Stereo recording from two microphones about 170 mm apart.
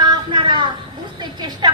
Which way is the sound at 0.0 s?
25° right (ahead or behind).